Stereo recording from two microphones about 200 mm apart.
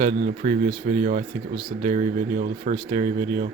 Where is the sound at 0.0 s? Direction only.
40° right (ahead or behind).